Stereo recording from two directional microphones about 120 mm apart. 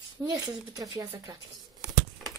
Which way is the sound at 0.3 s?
30° right (ahead or behind).